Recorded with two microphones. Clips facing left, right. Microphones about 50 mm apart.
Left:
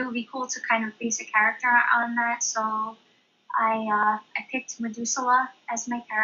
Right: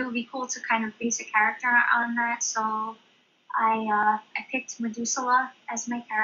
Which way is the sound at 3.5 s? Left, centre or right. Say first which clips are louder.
Even; centre.